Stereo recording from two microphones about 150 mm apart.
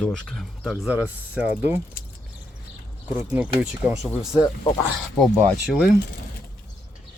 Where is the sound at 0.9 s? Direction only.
10° right (ahead or behind).